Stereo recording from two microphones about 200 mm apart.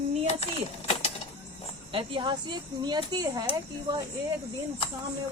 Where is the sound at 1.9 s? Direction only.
25° right (ahead or behind).